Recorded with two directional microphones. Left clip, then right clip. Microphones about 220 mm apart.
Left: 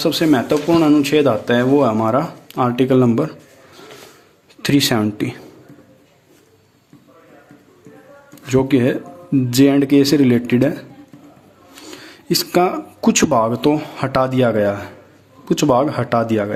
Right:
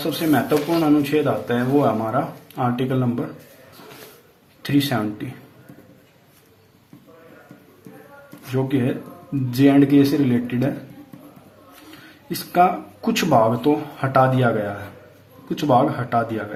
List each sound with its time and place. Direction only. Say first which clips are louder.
0.0 s speech: left 5 dB; 50° left (ahead or behind)
4.6 s speech: left 5 dB; 50° left (ahead or behind)
8.5 s speech: left 7 dB; 55° left (ahead or behind)
12.3 s speech: left 2 dB; 50° left (ahead or behind)